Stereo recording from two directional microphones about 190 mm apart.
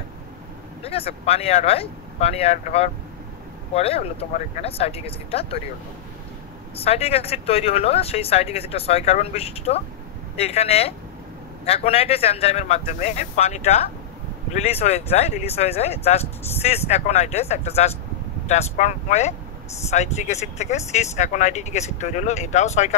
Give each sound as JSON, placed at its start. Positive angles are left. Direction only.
{"t": 0.8, "sound": "speech", "side_deg": 30}
{"t": 6.8, "sound": "speech", "side_deg": 30}